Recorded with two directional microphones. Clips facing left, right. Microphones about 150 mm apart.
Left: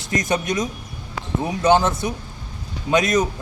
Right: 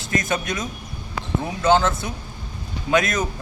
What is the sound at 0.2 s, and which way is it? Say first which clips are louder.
A man's voice: left 4 dB; 15° left (ahead or behind).